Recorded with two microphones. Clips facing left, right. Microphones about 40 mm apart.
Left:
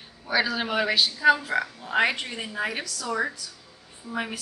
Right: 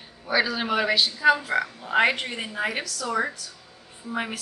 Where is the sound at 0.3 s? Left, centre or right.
Centre.